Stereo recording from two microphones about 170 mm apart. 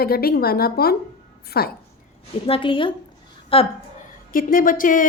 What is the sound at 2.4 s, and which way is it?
A woman's voice, 30° left (ahead or behind).